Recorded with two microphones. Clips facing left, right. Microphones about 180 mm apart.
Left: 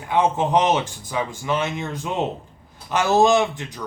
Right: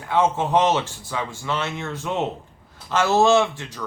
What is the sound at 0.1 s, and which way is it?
A man's voice, 15° left (ahead or behind).